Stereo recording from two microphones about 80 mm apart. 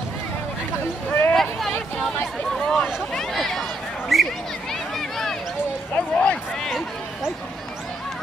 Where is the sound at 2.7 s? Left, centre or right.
Centre.